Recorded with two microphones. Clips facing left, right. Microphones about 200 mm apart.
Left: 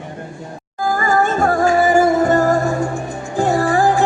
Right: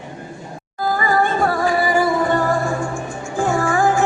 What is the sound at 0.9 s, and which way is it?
Music, 45° left (ahead or behind).